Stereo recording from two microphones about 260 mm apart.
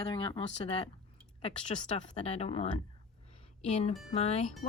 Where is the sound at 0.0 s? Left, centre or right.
Centre.